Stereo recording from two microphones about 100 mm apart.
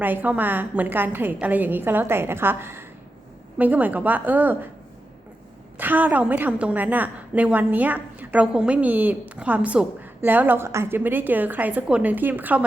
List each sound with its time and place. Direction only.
0.0 s a woman's voice: 20° right (ahead or behind)
5.7 s a woman's voice: 15° right (ahead or behind)